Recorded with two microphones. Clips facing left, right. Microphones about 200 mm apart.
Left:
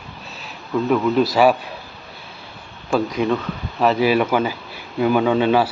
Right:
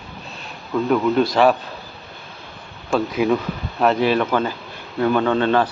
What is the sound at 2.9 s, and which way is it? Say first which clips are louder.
Speech: right 1 dB; 5° right (ahead or behind).